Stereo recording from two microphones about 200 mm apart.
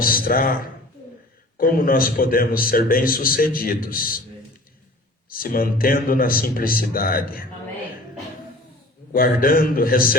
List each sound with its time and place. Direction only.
0.0 s a man's voice: 45° left (ahead or behind)
5.3 s a man's voice: 45° left (ahead or behind)
9.1 s a man's voice: 45° left (ahead or behind)